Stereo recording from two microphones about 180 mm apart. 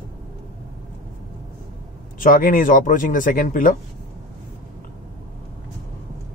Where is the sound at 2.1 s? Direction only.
50° left (ahead or behind).